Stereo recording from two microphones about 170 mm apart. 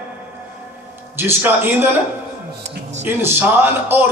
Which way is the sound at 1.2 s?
15° right (ahead or behind).